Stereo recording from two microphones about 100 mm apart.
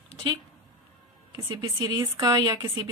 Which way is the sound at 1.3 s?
45° right (ahead or behind).